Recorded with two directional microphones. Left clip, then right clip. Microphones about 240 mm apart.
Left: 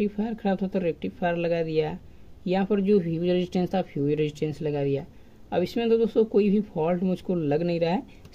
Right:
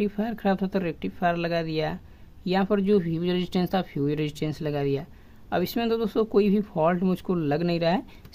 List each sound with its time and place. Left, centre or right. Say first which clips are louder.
0.0 s speech: right 1 dB; right